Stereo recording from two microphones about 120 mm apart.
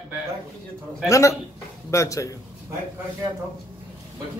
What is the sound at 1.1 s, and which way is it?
A man's voice, 25° left (ahead or behind).